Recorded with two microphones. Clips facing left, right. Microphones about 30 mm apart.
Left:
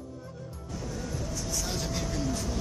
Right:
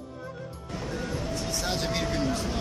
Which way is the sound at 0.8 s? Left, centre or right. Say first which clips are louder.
Right 4 dB; right.